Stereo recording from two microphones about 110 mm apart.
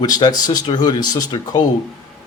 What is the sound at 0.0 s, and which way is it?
Speech, 40° left (ahead or behind).